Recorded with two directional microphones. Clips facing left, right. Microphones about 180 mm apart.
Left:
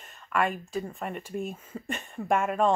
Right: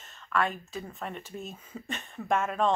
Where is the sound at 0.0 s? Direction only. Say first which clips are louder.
Left 2 dB; 15° left (ahead or behind).